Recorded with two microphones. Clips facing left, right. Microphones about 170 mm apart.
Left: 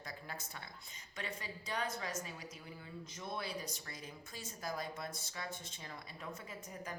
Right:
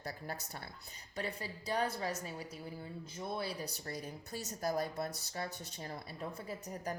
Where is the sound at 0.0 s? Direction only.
35° right (ahead or behind).